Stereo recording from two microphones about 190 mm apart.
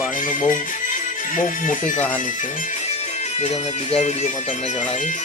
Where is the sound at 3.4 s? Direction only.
35° left (ahead or behind).